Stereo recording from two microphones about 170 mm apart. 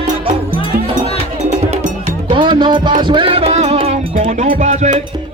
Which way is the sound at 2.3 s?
30° right (ahead or behind).